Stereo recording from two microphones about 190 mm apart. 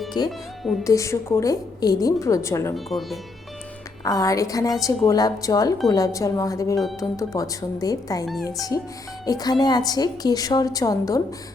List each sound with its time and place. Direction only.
0.3 s speech: centre (ahead or behind)
0.9 s a woman's voice: 15° left (ahead or behind)
2.7 s speech: centre (ahead or behind)
4.0 s a woman's voice: 20° left (ahead or behind)